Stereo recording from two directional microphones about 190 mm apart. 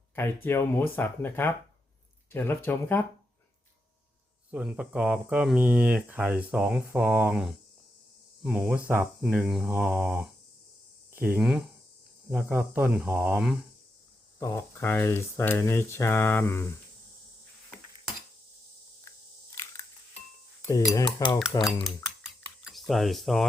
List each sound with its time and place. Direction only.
0.4 s speech: 10° left (ahead or behind)
4.5 s speech: 5° right (ahead or behind)
14.3 s speech: 15° left (ahead or behind)
19.0 s a sound: 15° left (ahead or behind)
20.6 s cutlery: 15° left (ahead or behind)
20.9 s dishes: 25° left (ahead or behind)
21.5 s speech: 15° left (ahead or behind)
22.6 s speech: centre (ahead or behind)